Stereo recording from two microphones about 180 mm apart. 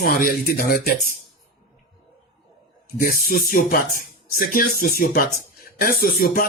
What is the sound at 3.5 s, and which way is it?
A man's voice, 55° left (ahead or behind).